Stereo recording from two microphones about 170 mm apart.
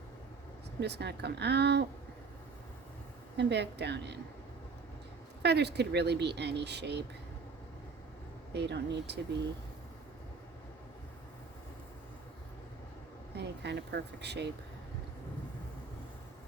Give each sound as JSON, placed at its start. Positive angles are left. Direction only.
{"t": 0.8, "sound": "speech", "side_deg": -80}
{"t": 3.3, "sound": "speech", "side_deg": -85}
{"t": 5.4, "sound": "speech", "side_deg": -80}
{"t": 8.5, "sound": "speech", "side_deg": -90}
{"t": 13.3, "sound": "speech", "side_deg": -80}